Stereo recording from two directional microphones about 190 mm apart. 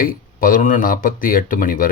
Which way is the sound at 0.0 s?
50° left (ahead or behind).